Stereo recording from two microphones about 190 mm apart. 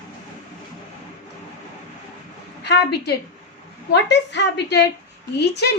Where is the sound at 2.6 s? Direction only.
60° left (ahead or behind).